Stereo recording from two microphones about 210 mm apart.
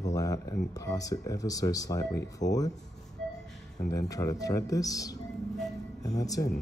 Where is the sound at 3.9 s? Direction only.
15° left (ahead or behind).